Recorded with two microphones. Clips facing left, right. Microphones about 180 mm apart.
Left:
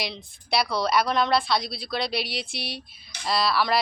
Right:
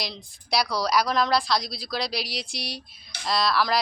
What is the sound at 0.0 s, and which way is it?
A woman's voice, centre (ahead or behind).